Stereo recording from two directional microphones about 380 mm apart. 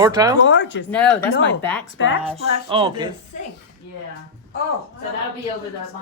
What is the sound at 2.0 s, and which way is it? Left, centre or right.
Speech, left.